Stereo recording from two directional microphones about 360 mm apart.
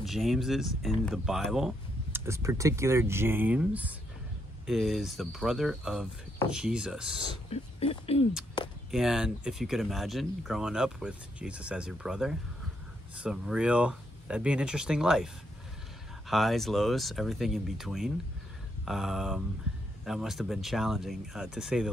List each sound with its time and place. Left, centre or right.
0.0 s speech: centre
7.4 s speech: centre
8.9 s speech: centre
16.3 s speech: centre